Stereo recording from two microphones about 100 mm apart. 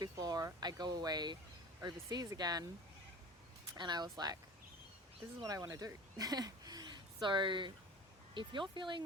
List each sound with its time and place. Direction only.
0.0 s speech: 40° right (ahead or behind)
3.8 s speech: 45° right (ahead or behind)
5.4 s speech: 35° right (ahead or behind); by 9.0 s 55° right (ahead or behind)